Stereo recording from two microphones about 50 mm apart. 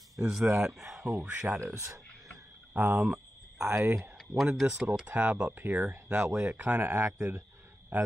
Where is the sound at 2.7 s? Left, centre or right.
Right.